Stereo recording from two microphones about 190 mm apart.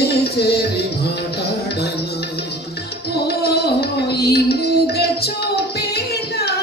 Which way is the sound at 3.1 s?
55° left (ahead or behind).